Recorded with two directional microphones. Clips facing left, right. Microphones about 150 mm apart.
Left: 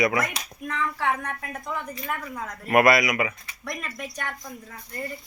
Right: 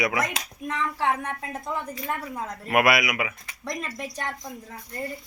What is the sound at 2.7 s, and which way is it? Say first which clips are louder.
Speech: left 3 dB; 5° right (ahead or behind).